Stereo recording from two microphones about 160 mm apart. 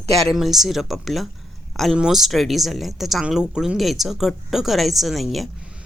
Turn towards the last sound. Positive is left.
turn(degrees=0)  # may be behind; listen again after turning